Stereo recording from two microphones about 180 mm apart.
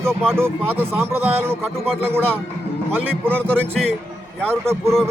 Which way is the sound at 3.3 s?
5° left (ahead or behind).